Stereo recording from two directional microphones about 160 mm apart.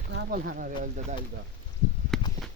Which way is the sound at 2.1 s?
Centre (ahead or behind).